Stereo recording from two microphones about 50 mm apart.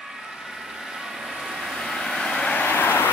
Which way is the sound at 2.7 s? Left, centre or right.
Left.